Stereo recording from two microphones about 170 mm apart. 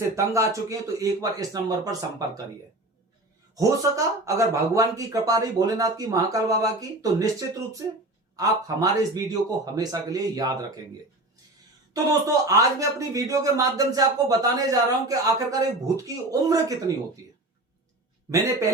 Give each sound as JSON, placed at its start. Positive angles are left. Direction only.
{"t": 0.0, "sound": "speech", "side_deg": -20}
{"t": 3.5, "sound": "speech", "side_deg": -20}
{"t": 12.5, "sound": "speech", "side_deg": -20}
{"t": 18.3, "sound": "a man's voice", "side_deg": -20}